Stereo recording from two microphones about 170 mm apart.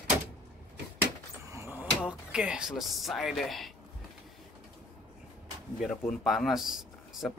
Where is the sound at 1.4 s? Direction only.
15° right (ahead or behind).